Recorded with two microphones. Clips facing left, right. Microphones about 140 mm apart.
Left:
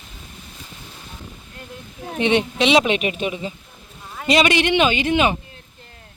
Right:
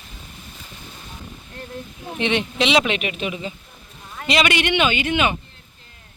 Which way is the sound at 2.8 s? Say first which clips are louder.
Left 3 dB; 35° left (ahead or behind).